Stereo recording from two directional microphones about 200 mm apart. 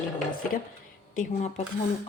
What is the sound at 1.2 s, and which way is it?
Speech, 35° left (ahead or behind).